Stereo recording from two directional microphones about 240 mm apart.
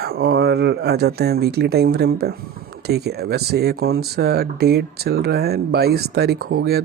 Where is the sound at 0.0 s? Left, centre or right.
Right.